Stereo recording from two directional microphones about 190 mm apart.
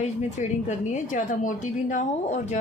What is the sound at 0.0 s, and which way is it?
Speech, 40° left (ahead or behind).